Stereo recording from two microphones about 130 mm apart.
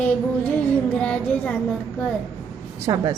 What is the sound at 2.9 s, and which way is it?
Speech, 35° right (ahead or behind).